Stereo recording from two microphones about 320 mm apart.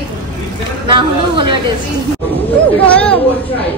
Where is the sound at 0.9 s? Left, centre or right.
Centre.